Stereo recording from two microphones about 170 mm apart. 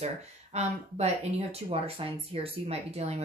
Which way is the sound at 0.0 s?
40° right (ahead or behind).